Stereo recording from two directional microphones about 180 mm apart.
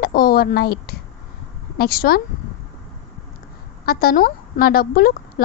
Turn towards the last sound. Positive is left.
turn(degrees=55)  # may be behind; listen again after turning